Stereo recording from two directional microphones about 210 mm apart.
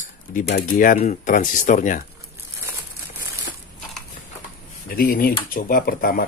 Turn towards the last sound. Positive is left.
turn(degrees=45)  # may be behind; listen again after turning